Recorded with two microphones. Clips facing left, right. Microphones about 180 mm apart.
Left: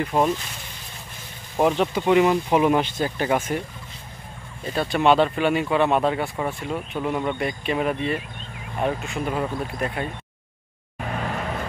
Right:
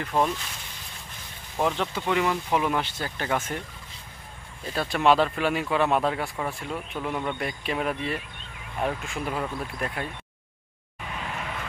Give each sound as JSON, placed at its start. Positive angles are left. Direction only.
{"t": 0.0, "sound": "speech", "side_deg": 15}
{"t": 1.6, "sound": "speech", "side_deg": 20}
{"t": 4.7, "sound": "speech", "side_deg": 0}
{"t": 11.0, "sound": "vehicle", "side_deg": 50}